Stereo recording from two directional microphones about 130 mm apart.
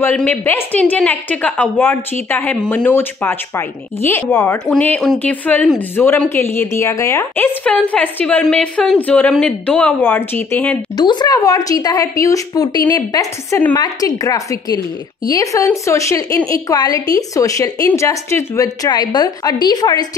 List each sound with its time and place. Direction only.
0.0 s a woman's voice: 10° left (ahead or behind)
7.6 s a woman's voice: 10° left (ahead or behind)
11.0 s a woman's voice: 35° left (ahead or behind)